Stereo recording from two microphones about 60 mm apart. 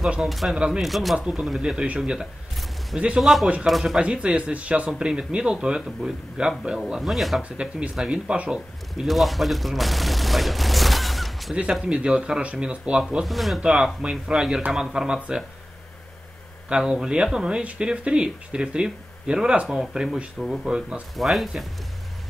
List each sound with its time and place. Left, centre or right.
0.2 s speech: centre
4.0 s speech: centre
7.9 s speech: centre
11.8 s speech: centre
13.2 s speech: centre
16.6 s speech: centre